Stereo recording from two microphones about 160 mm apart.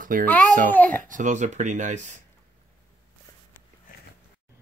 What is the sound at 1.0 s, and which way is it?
Speech, 50° right (ahead or behind).